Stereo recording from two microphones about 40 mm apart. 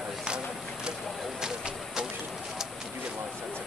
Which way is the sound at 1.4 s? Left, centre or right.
Centre.